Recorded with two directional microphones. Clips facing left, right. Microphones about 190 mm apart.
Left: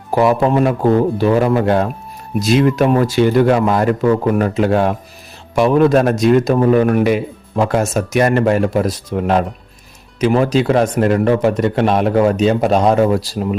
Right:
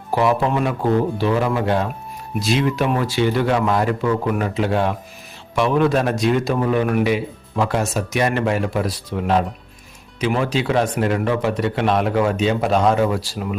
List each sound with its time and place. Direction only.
0.1 s a man's voice: 45° left (ahead or behind)